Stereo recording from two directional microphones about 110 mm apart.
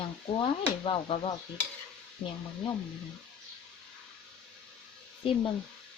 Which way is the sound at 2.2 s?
15° left (ahead or behind).